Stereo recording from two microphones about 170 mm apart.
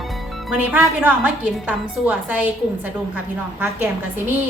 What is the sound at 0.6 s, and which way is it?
A woman's voice, 10° right (ahead or behind).